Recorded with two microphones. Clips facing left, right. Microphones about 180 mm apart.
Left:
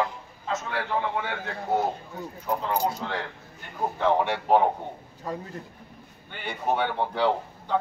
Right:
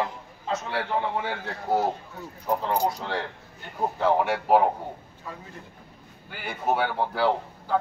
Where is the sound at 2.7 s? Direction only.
35° right (ahead or behind).